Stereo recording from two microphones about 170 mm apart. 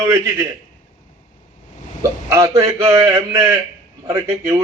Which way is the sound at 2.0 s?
20° right (ahead or behind).